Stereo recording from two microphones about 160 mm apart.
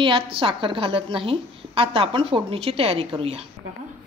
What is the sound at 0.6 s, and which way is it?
A woman's voice, 30° right (ahead or behind).